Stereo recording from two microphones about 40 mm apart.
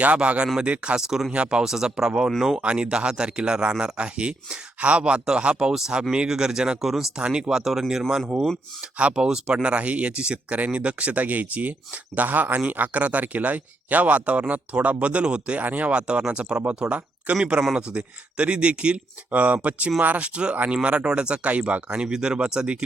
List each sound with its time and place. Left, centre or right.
0.0 s speech: right
0.9 s speech: centre
7.6 s speech: centre
8.8 s speech: right
9.1 s speech: right
15.6 s speech: right
15.9 s speech: right
19.3 s speech: right
21.4 s speech: right
21.8 s speech: right